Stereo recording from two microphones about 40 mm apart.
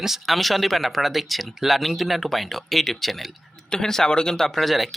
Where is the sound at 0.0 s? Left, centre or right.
Centre.